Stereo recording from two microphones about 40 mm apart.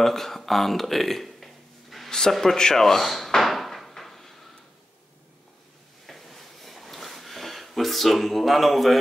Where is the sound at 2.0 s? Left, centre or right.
Centre.